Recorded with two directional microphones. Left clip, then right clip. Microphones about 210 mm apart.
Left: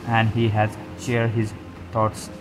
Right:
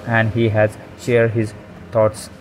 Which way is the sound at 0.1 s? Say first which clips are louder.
Right 4 dB; 15° right (ahead or behind).